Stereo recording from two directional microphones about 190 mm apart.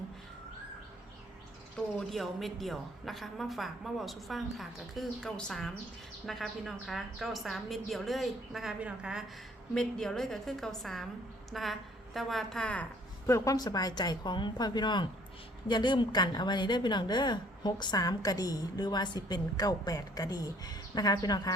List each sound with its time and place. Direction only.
2.0 s a woman's voice: centre (ahead or behind)
13.2 s a woman's voice: 15° left (ahead or behind)